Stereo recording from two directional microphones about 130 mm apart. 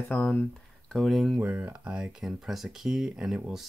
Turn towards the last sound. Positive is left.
turn(degrees=-5)  # may be behind; listen again after turning